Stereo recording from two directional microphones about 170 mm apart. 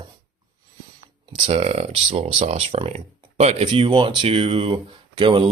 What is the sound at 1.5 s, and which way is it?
Speech, 35° right (ahead or behind).